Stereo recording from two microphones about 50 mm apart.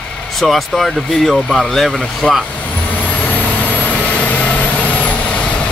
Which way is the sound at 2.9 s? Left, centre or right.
Left.